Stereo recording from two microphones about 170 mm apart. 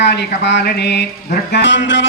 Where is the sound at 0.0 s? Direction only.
85° left.